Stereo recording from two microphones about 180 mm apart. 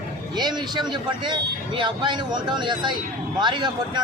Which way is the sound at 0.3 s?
25° right (ahead or behind).